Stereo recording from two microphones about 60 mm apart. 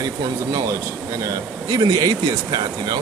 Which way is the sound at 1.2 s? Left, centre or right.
Right.